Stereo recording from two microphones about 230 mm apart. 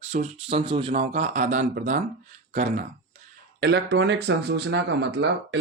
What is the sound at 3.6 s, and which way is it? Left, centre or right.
Speech, right.